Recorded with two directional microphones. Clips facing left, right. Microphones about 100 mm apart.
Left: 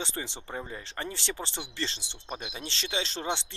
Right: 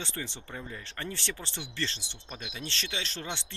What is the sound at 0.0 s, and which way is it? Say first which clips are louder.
Speech: left 2 dB; 20° left (ahead or behind).